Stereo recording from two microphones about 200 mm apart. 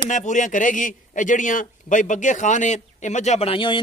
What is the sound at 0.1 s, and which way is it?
A man's voice, 40° left (ahead or behind).